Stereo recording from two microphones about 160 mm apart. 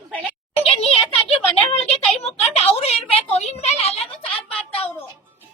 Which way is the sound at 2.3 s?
40° left (ahead or behind).